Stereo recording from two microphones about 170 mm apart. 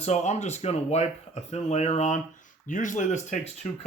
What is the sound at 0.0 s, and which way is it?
Speech, 45° left (ahead or behind).